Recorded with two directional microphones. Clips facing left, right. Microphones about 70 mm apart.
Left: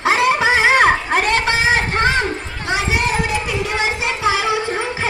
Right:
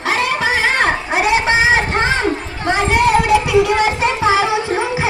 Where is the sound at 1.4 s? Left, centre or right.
Right.